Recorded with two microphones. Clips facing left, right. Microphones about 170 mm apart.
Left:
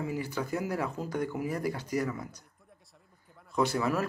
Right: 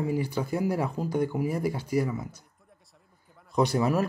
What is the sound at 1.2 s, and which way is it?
Speech, 30° right (ahead or behind).